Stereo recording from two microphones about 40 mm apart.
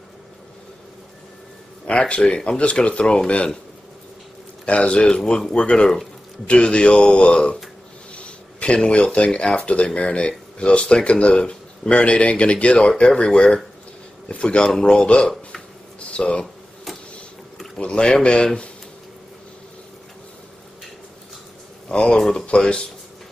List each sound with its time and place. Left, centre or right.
1.9 s speech: left
4.6 s speech: left
16.0 s a sound: left
17.7 s speech: left
21.8 s speech: left